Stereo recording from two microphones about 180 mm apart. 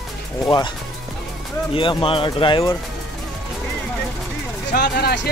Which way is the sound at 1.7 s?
30° left (ahead or behind).